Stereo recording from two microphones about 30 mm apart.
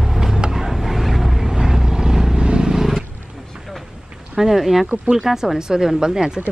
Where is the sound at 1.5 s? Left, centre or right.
Centre.